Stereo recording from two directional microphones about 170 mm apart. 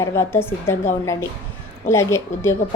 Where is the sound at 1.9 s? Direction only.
15° left (ahead or behind).